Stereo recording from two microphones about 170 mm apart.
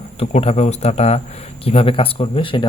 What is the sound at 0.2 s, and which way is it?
Speech, 35° left (ahead or behind).